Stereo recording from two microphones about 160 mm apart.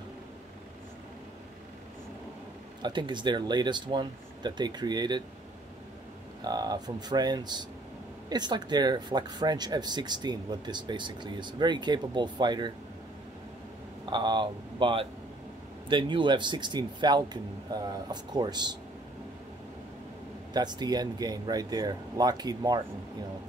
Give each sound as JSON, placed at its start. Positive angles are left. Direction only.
{"t": 2.8, "sound": "speech", "side_deg": -30}
{"t": 6.4, "sound": "speech", "side_deg": -25}
{"t": 14.0, "sound": "speech", "side_deg": -25}
{"t": 20.5, "sound": "speech", "side_deg": -25}